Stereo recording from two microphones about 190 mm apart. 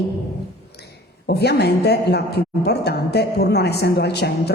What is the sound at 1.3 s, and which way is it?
A woman's voice, 60° left (ahead or behind).